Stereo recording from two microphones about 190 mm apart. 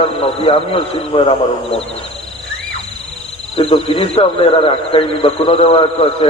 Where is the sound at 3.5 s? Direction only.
30° left (ahead or behind).